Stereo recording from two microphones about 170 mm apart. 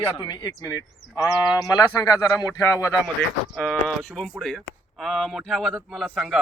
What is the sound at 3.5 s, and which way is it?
Speech, centre (ahead or behind).